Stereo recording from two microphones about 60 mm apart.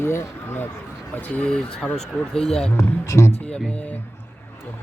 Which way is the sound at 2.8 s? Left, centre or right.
Left.